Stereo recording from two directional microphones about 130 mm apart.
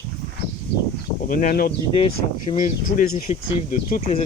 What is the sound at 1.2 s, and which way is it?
Speech, 90° left.